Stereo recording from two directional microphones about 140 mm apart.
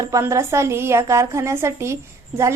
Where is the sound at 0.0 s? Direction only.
25° right (ahead or behind).